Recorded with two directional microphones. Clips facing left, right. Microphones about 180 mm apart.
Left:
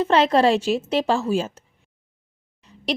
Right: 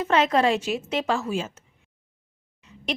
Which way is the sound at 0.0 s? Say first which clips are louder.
Left 4 dB; 30° left (ahead or behind).